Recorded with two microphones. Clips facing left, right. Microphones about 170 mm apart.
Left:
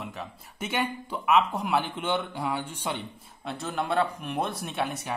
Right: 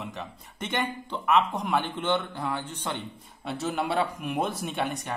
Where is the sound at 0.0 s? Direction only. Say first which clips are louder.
Even; centre (ahead or behind).